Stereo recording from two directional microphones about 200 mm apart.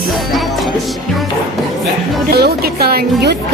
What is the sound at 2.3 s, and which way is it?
Speech, 50° right (ahead or behind).